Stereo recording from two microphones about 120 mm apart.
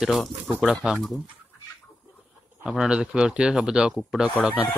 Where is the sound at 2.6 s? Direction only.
5° right (ahead or behind).